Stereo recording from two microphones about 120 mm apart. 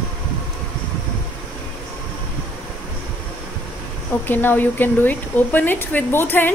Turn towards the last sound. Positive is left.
turn(degrees=15)  # may be behind; listen again after turning